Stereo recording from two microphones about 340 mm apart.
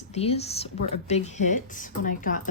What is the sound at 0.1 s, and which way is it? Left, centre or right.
A woman's voice, centre.